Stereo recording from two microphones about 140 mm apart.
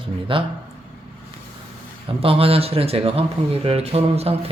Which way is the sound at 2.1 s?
40° right (ahead or behind).